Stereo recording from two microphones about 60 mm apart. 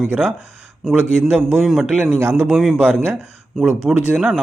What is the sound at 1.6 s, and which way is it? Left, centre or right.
Speech, centre.